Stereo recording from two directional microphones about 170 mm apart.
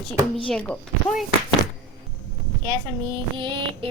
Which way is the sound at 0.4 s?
5° left (ahead or behind).